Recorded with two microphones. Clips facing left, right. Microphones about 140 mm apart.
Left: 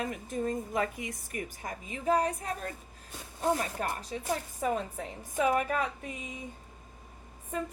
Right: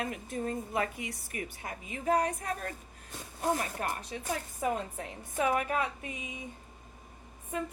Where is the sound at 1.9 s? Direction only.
30° left (ahead or behind).